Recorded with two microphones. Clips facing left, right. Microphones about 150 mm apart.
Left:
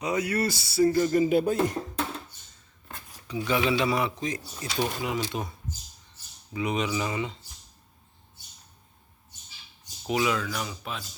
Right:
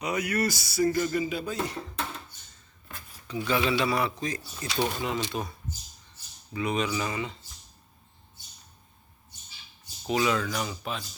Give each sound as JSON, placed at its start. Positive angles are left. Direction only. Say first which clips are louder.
{"t": 0.0, "sound": "speech", "louder": "left 1 dB", "side_deg": 25}
{"t": 1.1, "sound": "speech", "louder": "left 7 dB", "side_deg": 50}
{"t": 3.2, "sound": "speech", "louder": "left 1 dB", "side_deg": 15}
{"t": 10.2, "sound": "speech", "louder": "right 1 dB", "side_deg": 5}